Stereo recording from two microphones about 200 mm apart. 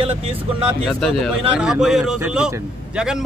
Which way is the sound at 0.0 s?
25° right (ahead or behind).